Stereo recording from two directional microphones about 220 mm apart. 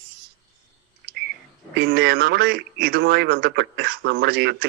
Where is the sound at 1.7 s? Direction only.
50° right (ahead or behind).